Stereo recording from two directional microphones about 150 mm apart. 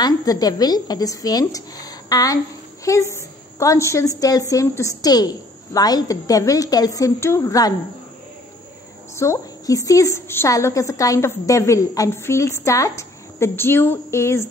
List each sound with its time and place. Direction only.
0.0 s a woman's voice: 25° left (ahead or behind)
9.1 s a woman's voice: 20° left (ahead or behind)